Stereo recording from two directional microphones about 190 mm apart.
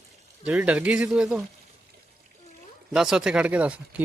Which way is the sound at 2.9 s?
5° right (ahead or behind).